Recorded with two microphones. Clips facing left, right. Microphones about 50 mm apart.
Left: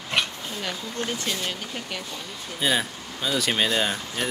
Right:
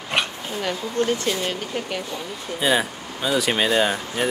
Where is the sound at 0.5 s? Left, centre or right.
Right.